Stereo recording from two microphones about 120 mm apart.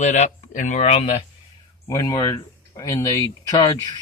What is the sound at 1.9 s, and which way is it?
Speech, 25° left (ahead or behind).